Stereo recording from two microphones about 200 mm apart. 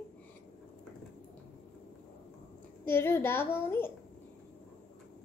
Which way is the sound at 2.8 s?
10° left (ahead or behind).